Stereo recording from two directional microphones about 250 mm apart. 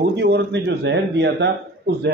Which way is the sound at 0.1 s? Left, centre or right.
Right.